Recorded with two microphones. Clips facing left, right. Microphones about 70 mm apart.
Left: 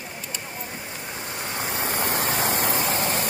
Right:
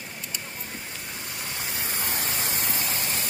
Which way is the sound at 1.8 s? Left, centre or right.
Left.